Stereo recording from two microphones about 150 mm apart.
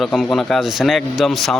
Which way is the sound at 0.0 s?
Centre (ahead or behind).